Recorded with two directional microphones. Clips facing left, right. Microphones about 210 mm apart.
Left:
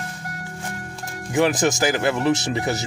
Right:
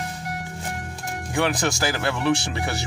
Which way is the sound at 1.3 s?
20° left (ahead or behind).